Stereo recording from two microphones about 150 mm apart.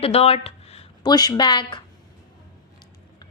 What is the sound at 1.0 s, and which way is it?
Speech, 25° left (ahead or behind).